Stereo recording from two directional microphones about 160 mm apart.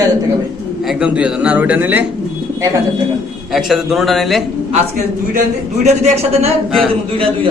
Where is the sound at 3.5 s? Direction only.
Centre (ahead or behind).